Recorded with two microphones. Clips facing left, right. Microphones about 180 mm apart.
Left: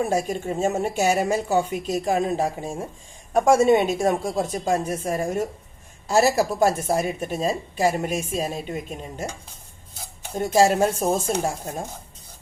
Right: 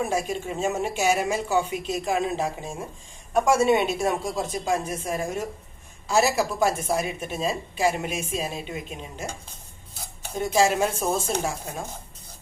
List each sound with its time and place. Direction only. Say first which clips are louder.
0.1 s a woman's voice: left 3 dB; 50° left (ahead or behind)
10.3 s a woman's voice: left 3 dB; 45° left (ahead or behind)